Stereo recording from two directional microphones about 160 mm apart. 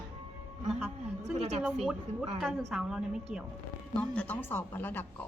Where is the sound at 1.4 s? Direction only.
40° right (ahead or behind).